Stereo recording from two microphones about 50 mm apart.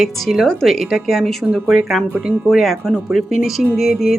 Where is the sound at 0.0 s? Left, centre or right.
Centre.